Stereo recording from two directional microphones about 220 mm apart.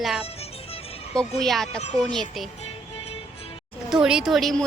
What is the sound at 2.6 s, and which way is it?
Music, 25° left (ahead or behind).